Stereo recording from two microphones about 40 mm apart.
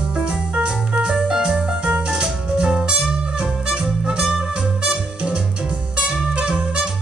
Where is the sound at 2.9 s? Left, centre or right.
Right.